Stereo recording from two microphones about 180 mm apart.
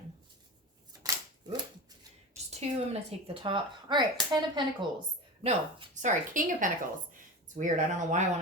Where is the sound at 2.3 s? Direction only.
35° right (ahead or behind).